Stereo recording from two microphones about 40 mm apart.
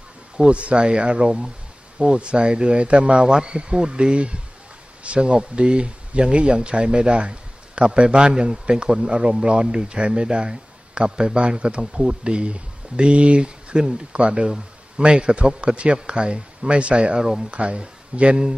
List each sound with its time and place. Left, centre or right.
0.4 s speech: right
17.2 s speech: centre
17.5 s speech: right